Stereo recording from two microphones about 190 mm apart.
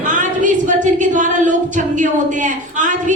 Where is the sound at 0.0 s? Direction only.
40° right (ahead or behind).